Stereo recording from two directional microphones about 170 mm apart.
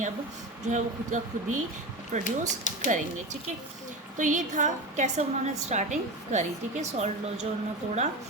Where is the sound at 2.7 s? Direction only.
45° left (ahead or behind).